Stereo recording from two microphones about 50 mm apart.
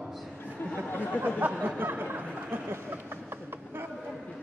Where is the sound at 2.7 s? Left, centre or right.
Right.